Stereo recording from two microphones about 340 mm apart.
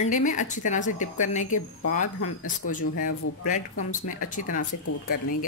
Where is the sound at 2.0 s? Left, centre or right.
Left.